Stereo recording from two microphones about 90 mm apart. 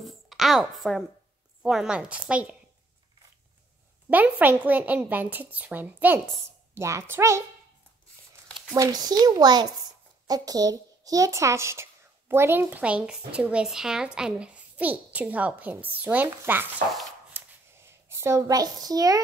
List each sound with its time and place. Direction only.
0.0 s a sound: centre (ahead or behind)
1.6 s a woman's voice: 5° right (ahead or behind)
4.1 s a child's voice: 20° right (ahead or behind)
6.7 s a woman's voice: 30° right (ahead or behind)
8.7 s a child's voice: 40° right (ahead or behind); by 16.6 s 20° right (ahead or behind)
17.3 s a sound: 30° right (ahead or behind)